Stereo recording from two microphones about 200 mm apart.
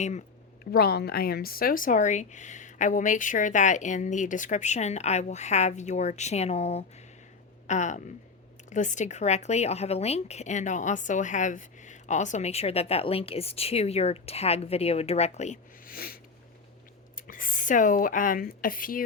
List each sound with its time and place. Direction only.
0.0 s speech: 35° left (ahead or behind)
17.2 s speech: 45° left (ahead or behind)